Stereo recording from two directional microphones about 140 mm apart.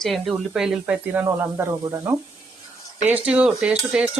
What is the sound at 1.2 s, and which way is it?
Speech, 15° right (ahead or behind).